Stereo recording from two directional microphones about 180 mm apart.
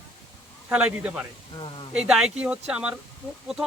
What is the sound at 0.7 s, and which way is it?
Speech, 5° right (ahead or behind).